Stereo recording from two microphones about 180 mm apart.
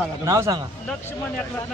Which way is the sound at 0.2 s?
15° right (ahead or behind).